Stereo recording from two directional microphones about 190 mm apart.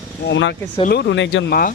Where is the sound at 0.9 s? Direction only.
65° left (ahead or behind).